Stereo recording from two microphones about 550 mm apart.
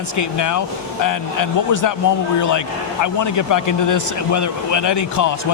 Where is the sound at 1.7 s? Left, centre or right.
Left.